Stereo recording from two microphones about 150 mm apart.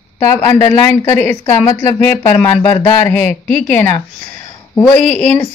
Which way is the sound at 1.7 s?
30° left (ahead or behind).